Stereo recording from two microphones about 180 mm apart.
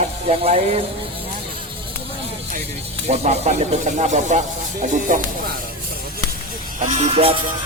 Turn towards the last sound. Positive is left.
turn(degrees=-35)  # may be behind; listen again after turning